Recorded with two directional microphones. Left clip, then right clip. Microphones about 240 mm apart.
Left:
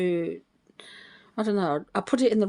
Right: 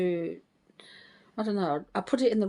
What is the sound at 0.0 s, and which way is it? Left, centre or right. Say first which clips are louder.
Speech: left 3 dB; left.